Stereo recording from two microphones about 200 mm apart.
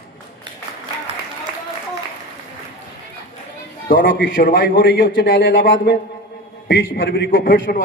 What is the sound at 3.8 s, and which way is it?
A man's voice, 45° left (ahead or behind).